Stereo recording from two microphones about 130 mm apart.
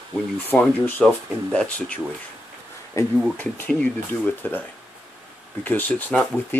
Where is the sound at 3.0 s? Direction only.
20° left (ahead or behind).